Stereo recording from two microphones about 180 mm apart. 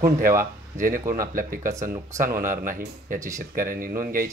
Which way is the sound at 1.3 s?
50° right (ahead or behind).